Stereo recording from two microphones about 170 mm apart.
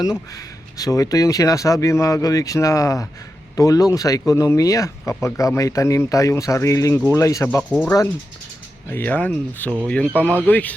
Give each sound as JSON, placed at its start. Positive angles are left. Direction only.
{"t": 0.0, "sound": "speech", "side_deg": 20}
{"t": 7.7, "sound": "speech", "side_deg": 5}